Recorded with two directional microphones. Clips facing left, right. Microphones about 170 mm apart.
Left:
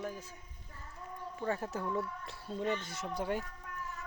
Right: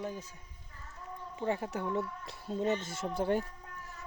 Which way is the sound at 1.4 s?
15° right (ahead or behind).